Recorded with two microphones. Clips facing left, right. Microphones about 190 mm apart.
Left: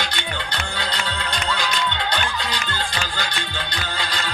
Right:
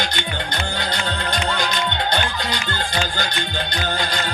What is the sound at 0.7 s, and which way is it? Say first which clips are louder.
Music: right 1 dB; 45° right (ahead or behind).